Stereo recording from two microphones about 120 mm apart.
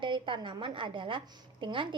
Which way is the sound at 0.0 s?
45° right (ahead or behind).